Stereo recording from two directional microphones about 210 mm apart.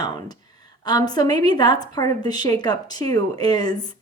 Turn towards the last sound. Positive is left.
turn(degrees=20)  # may be behind; listen again after turning